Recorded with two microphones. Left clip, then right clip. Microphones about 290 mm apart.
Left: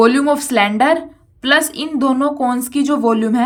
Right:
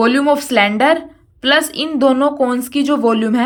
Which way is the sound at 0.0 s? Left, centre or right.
Centre.